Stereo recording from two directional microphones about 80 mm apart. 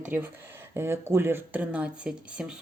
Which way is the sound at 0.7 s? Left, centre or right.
Right.